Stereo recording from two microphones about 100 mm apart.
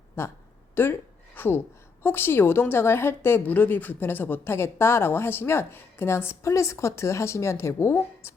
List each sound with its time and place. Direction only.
0.2 s a woman's voice: 25° left (ahead or behind)